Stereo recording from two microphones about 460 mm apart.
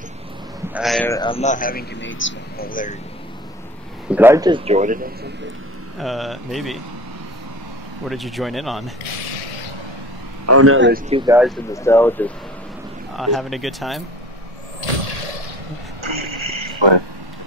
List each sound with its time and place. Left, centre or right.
0.7 s a man's voice: centre
4.1 s a man's voice: centre
5.9 s speech: centre
8.1 s speech: centre
10.4 s a man's voice: right; by 11.5 s centre
11.7 s speech: centre
16.0 s a sound: right